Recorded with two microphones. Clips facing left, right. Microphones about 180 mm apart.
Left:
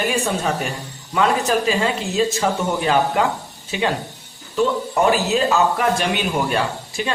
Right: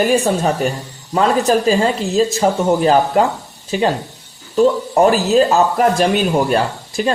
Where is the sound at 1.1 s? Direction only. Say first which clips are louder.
Right 4 dB; 35° right (ahead or behind).